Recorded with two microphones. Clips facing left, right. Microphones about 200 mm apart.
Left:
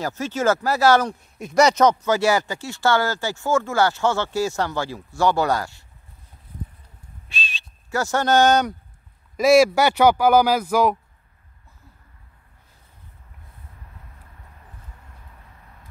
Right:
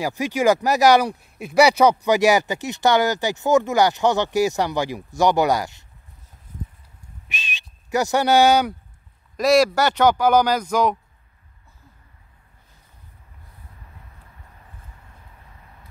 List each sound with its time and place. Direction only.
0.0 s speech: 15° right (ahead or behind)
7.2 s a sound: 20° right (ahead or behind)
9.4 s speech: 5° left (ahead or behind)